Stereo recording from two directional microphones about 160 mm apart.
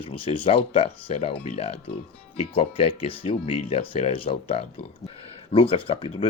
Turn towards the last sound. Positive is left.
turn(degrees=35)  # may be behind; listen again after turning